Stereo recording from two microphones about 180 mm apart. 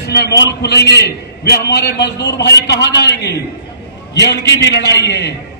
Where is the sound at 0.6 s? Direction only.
65° left (ahead or behind).